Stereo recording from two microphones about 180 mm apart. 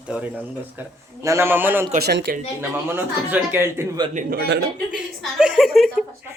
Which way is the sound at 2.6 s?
10° right (ahead or behind).